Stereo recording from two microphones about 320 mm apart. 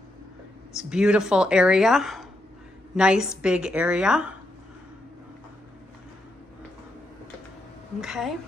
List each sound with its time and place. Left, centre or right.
0.7 s speech: centre
8.0 s speech: centre